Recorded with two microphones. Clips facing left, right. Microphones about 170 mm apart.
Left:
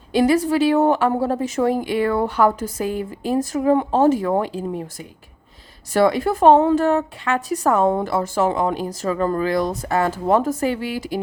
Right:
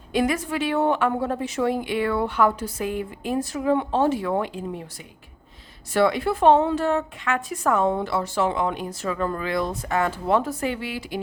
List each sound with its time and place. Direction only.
0.1 s a woman's voice: 35° left (ahead or behind)